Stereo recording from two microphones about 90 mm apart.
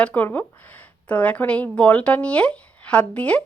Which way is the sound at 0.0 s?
15° left (ahead or behind).